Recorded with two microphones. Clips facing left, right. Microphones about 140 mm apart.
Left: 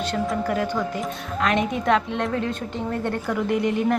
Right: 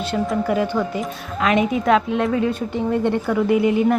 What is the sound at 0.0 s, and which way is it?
A woman's voice, 10° right (ahead or behind).